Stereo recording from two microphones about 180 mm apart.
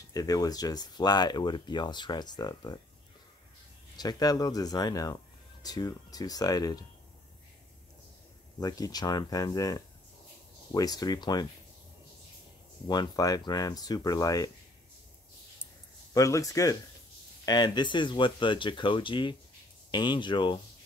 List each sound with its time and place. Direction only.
0.1 s speech: 20° left (ahead or behind)
3.9 s speech: 20° left (ahead or behind)
8.5 s speech: 20° left (ahead or behind)
12.8 s speech: 25° left (ahead or behind)
16.1 s speech: 20° left (ahead or behind)